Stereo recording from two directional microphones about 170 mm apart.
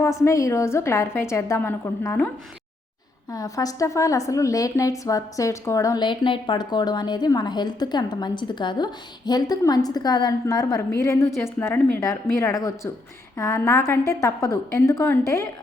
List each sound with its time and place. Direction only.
0.0 s a woman's voice: 20° left (ahead or behind)
3.3 s a woman's voice: 20° left (ahead or behind)